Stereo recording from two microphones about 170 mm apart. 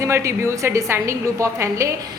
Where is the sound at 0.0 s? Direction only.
15° right (ahead or behind).